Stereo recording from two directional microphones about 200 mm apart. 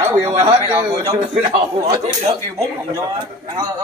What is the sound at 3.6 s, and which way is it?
Speech, 20° right (ahead or behind).